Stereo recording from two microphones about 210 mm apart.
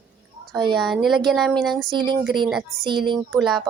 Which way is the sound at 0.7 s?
Centre (ahead or behind).